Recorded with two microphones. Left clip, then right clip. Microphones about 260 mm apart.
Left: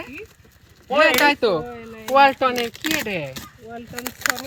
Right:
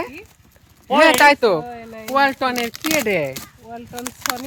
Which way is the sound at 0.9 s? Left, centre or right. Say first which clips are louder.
Right 4 dB; centre.